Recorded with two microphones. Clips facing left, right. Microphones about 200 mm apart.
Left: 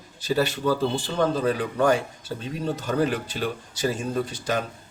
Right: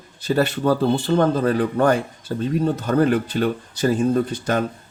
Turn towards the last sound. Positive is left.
turn(degrees=-55)  # may be behind; listen again after turning